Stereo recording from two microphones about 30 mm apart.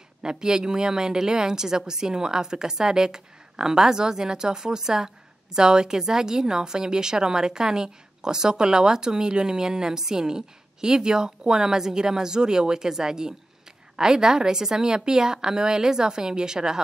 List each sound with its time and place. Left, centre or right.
0.2 s a woman's voice: right